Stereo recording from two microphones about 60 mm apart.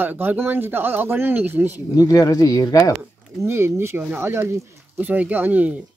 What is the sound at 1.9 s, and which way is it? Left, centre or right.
Speech, left.